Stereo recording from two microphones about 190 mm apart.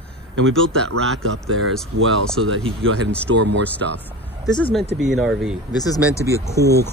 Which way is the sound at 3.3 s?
65° right (ahead or behind).